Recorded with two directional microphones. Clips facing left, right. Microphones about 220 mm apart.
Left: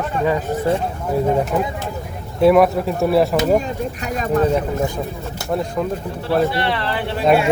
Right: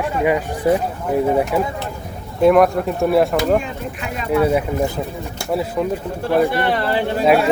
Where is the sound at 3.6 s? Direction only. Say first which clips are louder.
Left 3 dB; 40° left (ahead or behind).